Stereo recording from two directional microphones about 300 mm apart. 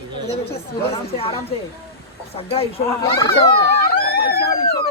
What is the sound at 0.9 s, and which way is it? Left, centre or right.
Speech, centre.